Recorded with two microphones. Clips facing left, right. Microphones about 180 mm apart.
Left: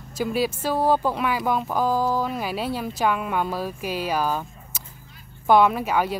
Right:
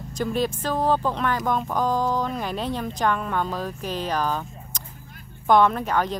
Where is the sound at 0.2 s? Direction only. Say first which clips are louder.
Left 1 dB; 5° left (ahead or behind).